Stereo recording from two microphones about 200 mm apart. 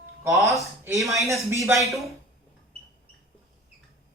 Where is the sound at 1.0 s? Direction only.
Centre (ahead or behind).